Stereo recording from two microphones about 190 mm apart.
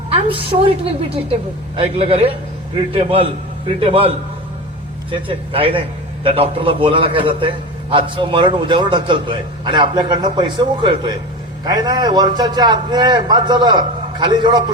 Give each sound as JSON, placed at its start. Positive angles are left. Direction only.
{"t": 0.1, "sound": "a woman's voice", "side_deg": -30}